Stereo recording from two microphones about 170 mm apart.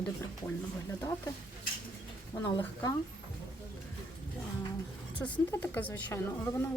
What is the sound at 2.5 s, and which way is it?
Speech, 20° left (ahead or behind).